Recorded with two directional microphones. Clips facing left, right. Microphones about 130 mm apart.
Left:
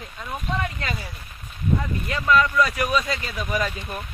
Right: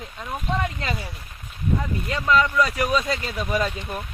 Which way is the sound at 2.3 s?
20° right (ahead or behind).